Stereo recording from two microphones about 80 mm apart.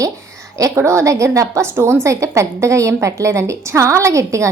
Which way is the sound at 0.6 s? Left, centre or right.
Right.